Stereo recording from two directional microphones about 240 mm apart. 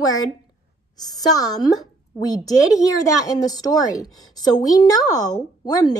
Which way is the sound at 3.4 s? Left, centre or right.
Centre.